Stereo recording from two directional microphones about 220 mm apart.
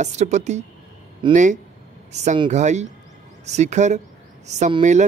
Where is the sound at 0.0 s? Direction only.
30° right (ahead or behind).